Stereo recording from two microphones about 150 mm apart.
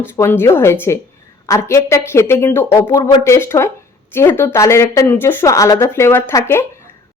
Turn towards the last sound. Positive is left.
turn(degrees=15)  # may be behind; listen again after turning